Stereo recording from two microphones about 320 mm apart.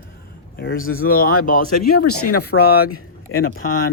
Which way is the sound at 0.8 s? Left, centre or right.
Left.